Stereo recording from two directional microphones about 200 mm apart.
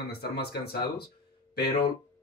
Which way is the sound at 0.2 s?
50° left (ahead or behind).